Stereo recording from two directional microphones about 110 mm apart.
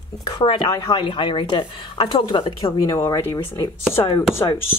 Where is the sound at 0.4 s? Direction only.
50° left (ahead or behind).